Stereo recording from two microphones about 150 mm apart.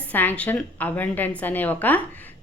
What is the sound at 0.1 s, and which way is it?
A woman's voice, 10° left (ahead or behind).